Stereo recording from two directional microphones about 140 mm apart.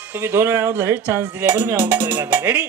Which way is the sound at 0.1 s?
15° right (ahead or behind).